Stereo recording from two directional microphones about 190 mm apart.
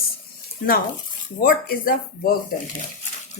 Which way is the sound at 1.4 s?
50° left (ahead or behind).